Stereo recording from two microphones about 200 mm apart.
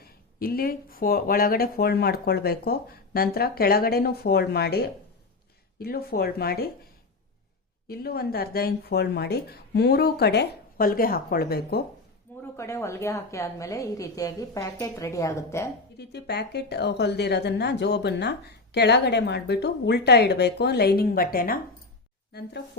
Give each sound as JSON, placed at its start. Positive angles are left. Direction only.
{"t": 0.0, "sound": "speech", "side_deg": 50}
{"t": 5.8, "sound": "speech", "side_deg": 50}
{"t": 7.9, "sound": "speech", "side_deg": 50}
{"t": 12.5, "sound": "a woman's voice", "side_deg": 15}
{"t": 16.0, "sound": "a woman's voice", "side_deg": 55}